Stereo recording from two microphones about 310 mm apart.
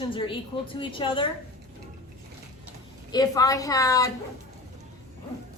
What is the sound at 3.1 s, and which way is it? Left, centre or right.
A woman's voice, centre.